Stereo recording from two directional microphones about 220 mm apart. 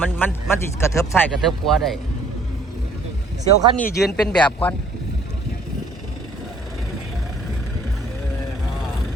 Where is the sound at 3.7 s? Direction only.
5° left (ahead or behind).